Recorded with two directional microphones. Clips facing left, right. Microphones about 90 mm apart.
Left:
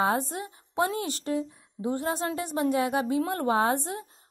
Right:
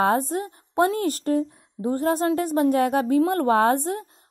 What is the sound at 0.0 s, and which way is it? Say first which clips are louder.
A woman's voice: right 5 dB; 50° right (ahead or behind).